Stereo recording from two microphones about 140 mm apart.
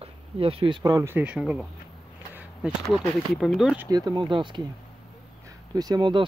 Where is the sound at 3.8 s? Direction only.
30° right (ahead or behind).